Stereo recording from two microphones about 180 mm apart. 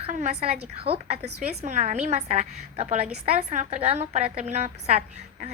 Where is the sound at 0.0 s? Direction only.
40° right (ahead or behind).